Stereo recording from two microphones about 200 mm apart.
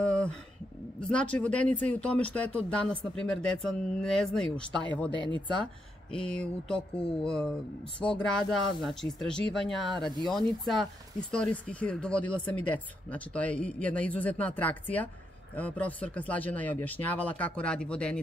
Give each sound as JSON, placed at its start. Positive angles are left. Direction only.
{"t": 0.0, "sound": "a sound", "side_deg": 5}
{"t": 1.0, "sound": "speech", "side_deg": 5}
{"t": 1.7, "sound": "speech", "side_deg": -35}
{"t": 2.0, "sound": "speech", "side_deg": 5}